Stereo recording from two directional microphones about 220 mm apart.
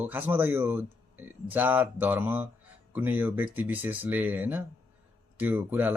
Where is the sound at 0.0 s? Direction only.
10° right (ahead or behind).